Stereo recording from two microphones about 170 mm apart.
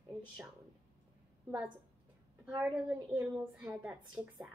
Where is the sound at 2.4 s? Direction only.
10° right (ahead or behind).